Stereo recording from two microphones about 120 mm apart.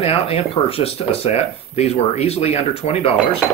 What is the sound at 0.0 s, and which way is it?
Speech, 55° left (ahead or behind).